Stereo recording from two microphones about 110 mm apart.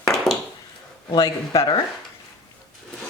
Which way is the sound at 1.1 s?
35° left (ahead or behind).